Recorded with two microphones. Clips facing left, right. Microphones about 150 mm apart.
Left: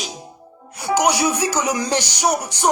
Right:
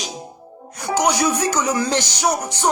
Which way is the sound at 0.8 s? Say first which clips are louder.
Left 1 dB; 10° left (ahead or behind).